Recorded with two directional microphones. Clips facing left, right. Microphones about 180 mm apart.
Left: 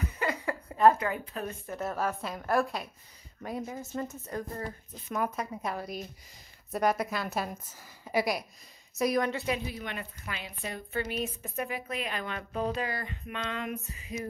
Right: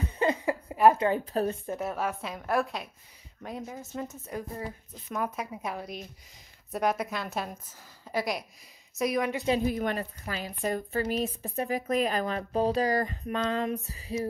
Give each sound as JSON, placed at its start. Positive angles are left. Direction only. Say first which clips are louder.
{"t": 0.3, "sound": "a sound", "louder": "right 5 dB", "side_deg": -15}
{"t": 0.9, "sound": "speech", "louder": "right 7 dB", "side_deg": -30}
{"t": 1.8, "sound": "speech", "louder": "even", "side_deg": -5}
{"t": 9.7, "sound": "speech", "louder": "right 9 dB", "side_deg": -45}